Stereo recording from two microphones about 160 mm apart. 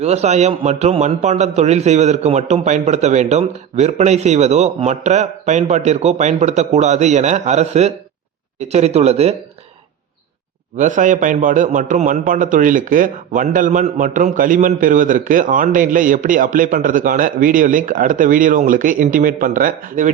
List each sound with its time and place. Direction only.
0.0 s a man's voice: 45° right (ahead or behind)
10.8 s a man's voice: 50° right (ahead or behind)